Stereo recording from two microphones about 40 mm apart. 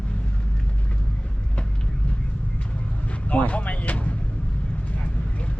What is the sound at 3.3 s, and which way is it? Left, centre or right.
Vehicle, left.